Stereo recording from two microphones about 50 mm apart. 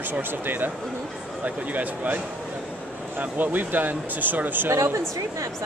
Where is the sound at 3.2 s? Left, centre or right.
Right.